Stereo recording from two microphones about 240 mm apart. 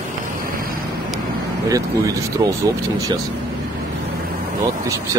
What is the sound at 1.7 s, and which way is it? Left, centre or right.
Speech, centre.